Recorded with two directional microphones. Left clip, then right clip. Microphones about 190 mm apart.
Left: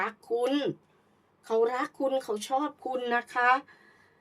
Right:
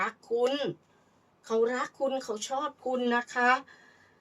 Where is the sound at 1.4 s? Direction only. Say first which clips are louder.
Left 1 dB; 45° left (ahead or behind).